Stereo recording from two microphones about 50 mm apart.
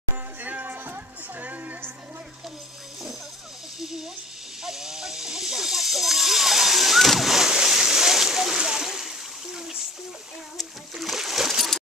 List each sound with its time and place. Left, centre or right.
0.4 s music: right
4.6 s snake: centre
7.5 s a sound: centre
10.6 s splash: centre